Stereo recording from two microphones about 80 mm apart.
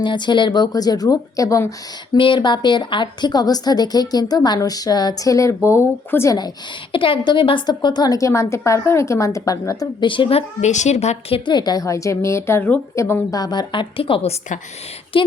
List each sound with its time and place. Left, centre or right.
0.0 s a woman's voice: left
2.1 s a woman's voice: left
6.9 s a woman's voice: left
8.3 s a woman's voice: left
10.0 s a woman's voice: left
11.3 s a woman's voice: left
13.3 s a woman's voice: left
15.1 s a woman's voice: left